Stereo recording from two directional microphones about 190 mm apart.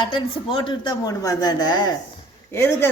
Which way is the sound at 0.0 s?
25° left (ahead or behind).